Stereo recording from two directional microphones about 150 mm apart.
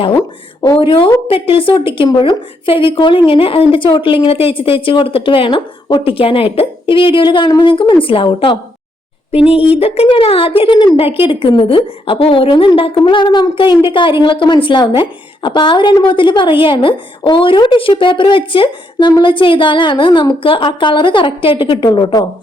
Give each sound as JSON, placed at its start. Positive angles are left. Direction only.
{"t": 0.0, "sound": "a woman's voice", "side_deg": 30}